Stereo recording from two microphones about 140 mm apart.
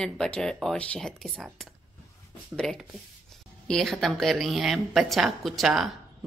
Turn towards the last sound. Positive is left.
turn(degrees=0)  # may be behind; listen again after turning